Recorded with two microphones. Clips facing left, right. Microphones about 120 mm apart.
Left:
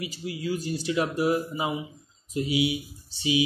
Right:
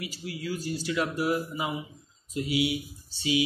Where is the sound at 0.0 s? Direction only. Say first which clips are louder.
Left 3 dB; 25° left (ahead or behind).